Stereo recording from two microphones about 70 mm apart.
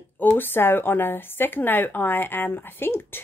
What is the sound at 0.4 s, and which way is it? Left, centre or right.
Speech, left.